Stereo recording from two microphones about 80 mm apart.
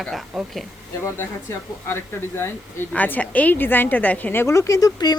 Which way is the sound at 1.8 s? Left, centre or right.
Left.